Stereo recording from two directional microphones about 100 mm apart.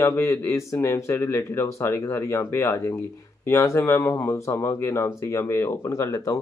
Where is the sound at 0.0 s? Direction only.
25° left (ahead or behind).